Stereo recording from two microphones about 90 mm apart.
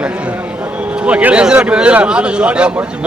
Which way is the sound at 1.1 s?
15° right (ahead or behind).